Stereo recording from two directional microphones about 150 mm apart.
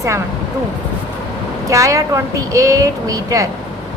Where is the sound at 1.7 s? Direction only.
20° right (ahead or behind).